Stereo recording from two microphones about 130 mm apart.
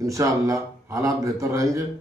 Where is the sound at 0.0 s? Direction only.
25° right (ahead or behind).